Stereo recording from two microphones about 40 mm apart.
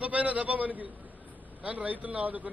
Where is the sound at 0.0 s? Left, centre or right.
Right.